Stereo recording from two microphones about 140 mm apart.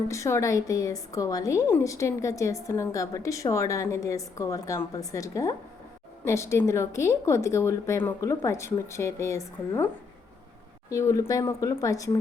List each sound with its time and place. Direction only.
0.1 s a woman's voice: 20° left (ahead or behind)